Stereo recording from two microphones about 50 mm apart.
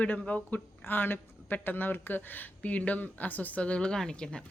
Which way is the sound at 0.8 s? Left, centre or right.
Left.